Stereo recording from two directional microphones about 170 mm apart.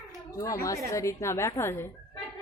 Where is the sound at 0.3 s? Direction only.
20° left (ahead or behind).